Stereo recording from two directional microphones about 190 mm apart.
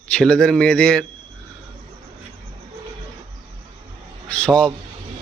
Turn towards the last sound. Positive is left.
turn(degrees=5)  # may be behind; listen again after turning